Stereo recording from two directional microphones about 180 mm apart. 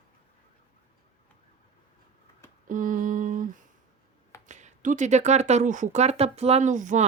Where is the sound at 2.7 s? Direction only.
50° right (ahead or behind).